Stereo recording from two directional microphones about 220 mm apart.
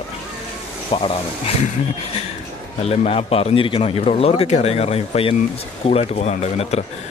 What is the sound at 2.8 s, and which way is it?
A man's voice, 30° left (ahead or behind).